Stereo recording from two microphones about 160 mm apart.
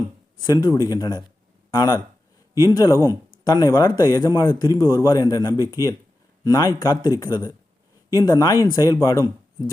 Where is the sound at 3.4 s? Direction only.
25° left (ahead or behind).